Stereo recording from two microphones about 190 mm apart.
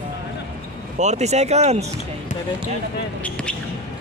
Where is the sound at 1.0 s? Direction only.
35° right (ahead or behind).